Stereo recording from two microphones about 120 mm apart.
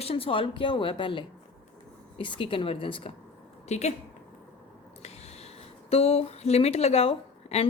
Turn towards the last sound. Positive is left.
turn(degrees=60)  # may be behind; listen again after turning